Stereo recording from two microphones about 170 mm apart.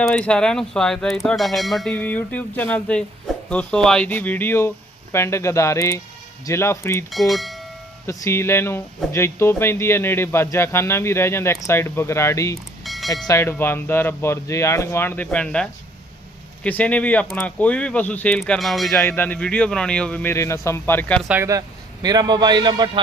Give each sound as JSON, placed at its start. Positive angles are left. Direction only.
{"t": 0.0, "sound": "speech", "side_deg": 5}
{"t": 7.1, "sound": "speech", "side_deg": 0}
{"t": 8.0, "sound": "speech", "side_deg": 15}
{"t": 12.8, "sound": "a sound", "side_deg": 0}
{"t": 13.2, "sound": "speech", "side_deg": 15}
{"t": 18.9, "sound": "speech", "side_deg": 15}
{"t": 21.2, "sound": "a man's voice", "side_deg": -15}